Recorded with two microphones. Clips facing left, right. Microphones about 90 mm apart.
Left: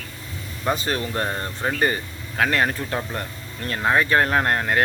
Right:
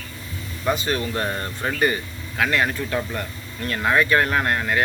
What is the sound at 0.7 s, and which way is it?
Speech, 35° left (ahead or behind).